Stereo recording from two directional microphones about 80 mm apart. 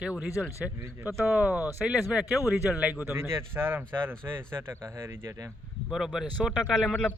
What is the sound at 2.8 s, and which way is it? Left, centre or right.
Speech, centre.